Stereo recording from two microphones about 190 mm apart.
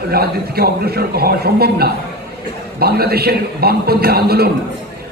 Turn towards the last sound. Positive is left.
turn(degrees=-55)  # may be behind; listen again after turning